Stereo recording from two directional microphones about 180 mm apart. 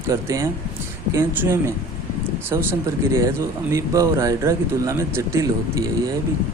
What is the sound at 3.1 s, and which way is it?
Speech, 15° right (ahead or behind).